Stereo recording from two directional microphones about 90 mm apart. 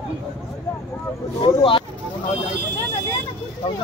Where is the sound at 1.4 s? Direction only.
70° left (ahead or behind).